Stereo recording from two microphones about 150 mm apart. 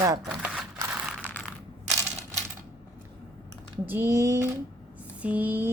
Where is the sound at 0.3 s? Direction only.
5° right (ahead or behind).